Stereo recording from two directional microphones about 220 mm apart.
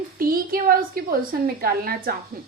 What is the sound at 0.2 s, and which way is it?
A woman's voice, 40° right (ahead or behind).